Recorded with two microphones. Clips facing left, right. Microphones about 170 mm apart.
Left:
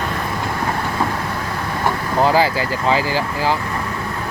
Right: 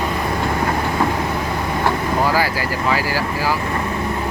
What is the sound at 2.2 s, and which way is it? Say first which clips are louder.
Speech: left 6 dB; 25° left (ahead or behind).